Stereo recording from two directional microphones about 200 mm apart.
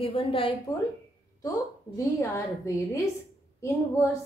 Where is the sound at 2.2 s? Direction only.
15° left (ahead or behind).